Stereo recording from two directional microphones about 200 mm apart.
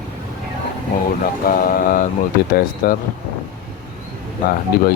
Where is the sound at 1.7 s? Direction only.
45° left (ahead or behind).